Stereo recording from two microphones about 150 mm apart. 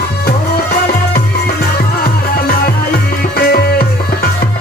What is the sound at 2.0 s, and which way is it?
Music, 80° left.